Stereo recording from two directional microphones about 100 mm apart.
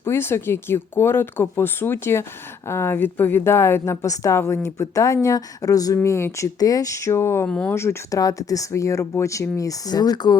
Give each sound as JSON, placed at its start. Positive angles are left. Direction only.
{"t": 0.0, "sound": "a woman's voice", "side_deg": 25}
{"t": 7.4, "sound": "speech", "side_deg": 15}
{"t": 7.7, "sound": "speech", "side_deg": 25}